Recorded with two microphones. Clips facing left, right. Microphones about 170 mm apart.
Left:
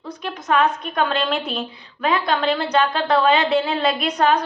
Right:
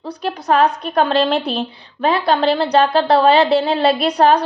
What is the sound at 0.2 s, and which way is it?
A woman's voice, 35° right (ahead or behind).